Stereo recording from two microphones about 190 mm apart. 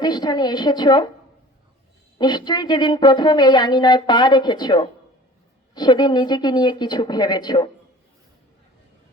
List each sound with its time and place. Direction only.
0.0 s a woman's voice: 20° left (ahead or behind)
2.1 s a woman's voice: 25° left (ahead or behind)